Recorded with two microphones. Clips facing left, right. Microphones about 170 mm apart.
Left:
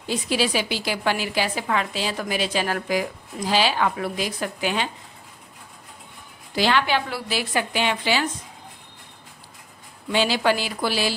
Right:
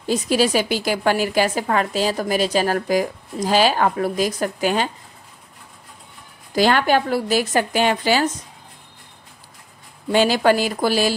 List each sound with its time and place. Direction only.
0.0 s a woman's voice: 45° right (ahead or behind)
6.5 s a woman's voice: 45° right (ahead or behind)
10.1 s a woman's voice: 45° right (ahead or behind)